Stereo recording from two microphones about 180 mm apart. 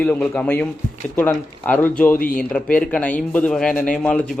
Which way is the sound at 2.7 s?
10° left (ahead or behind).